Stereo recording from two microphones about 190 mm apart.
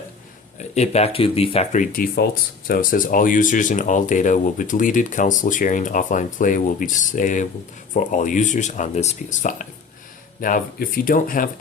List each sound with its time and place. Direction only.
0.7 s speech: 35° left (ahead or behind)
1.9 s speech: 50° left (ahead or behind)